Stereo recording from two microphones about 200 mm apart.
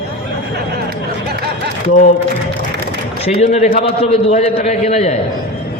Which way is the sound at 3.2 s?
30° left (ahead or behind).